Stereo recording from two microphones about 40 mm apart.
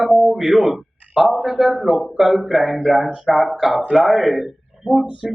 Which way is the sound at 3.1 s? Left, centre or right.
Centre.